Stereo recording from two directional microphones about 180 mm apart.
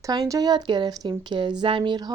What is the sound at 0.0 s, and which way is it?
Speech, 20° right (ahead or behind).